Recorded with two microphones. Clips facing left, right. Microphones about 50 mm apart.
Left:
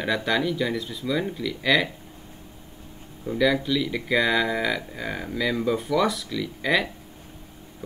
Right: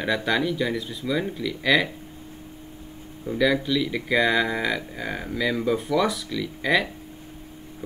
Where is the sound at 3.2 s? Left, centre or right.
Centre.